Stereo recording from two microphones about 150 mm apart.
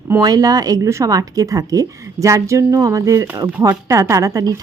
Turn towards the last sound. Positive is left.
turn(degrees=-20)  # may be behind; listen again after turning